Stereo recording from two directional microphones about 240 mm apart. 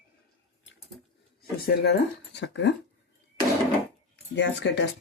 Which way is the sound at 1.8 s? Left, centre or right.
Left.